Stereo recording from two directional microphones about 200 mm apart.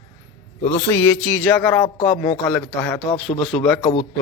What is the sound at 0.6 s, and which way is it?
A man's voice, 10° left (ahead or behind).